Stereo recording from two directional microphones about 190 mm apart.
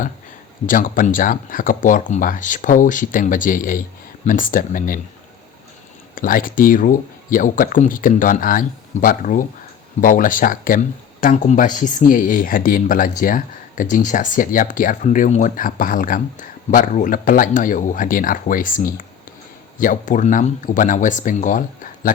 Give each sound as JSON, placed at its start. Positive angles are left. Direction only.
{"t": 0.7, "sound": "speech", "side_deg": 45}
{"t": 6.1, "sound": "speech", "side_deg": 45}